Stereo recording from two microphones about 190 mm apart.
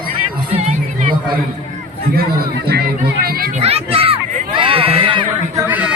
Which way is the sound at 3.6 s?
30° right (ahead or behind).